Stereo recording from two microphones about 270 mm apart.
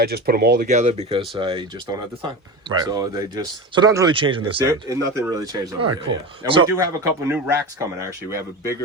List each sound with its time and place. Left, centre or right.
0.0 s speech: right; by 8.7 s centre